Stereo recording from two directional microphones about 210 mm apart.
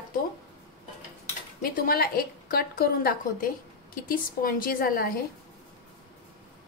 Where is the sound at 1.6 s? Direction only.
45° left (ahead or behind).